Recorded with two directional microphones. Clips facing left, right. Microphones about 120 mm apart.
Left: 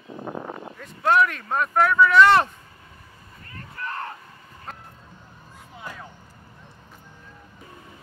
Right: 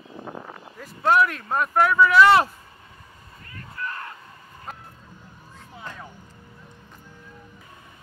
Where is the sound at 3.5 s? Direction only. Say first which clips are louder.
Left 1 dB; 30° left (ahead or behind).